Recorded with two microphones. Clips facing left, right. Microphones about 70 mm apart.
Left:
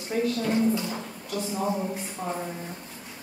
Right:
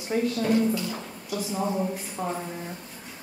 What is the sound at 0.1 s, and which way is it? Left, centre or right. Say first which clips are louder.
Speech: right 1 dB; centre.